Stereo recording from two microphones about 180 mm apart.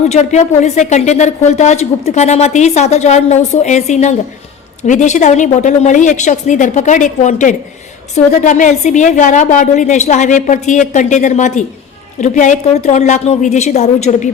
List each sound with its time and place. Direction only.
0.1 s a woman's voice: 40° left (ahead or behind)